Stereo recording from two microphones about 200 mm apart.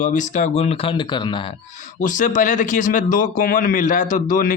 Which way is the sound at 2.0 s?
40° left (ahead or behind).